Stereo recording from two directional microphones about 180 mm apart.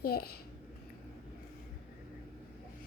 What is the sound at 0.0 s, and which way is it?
Speech, 55° left (ahead or behind).